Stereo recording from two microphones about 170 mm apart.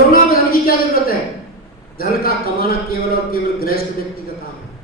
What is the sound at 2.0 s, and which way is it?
A man's voice, 60° left (ahead or behind).